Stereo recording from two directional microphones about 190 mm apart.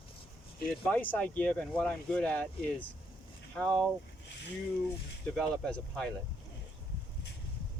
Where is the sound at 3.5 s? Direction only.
Centre (ahead or behind).